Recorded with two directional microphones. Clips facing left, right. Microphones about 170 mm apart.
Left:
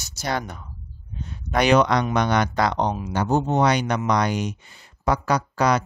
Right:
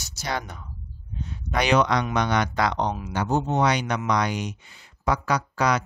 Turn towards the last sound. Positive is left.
turn(degrees=40)  # may be behind; listen again after turning